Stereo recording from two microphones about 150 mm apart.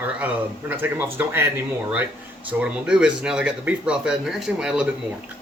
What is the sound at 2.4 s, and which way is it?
Speech, 10° right (ahead or behind).